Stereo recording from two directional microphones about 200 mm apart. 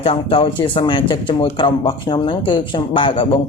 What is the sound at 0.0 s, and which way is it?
Speech, 25° left (ahead or behind).